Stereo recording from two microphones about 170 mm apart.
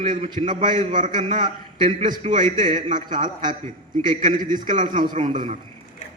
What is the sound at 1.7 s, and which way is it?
A man's voice, 50° right (ahead or behind).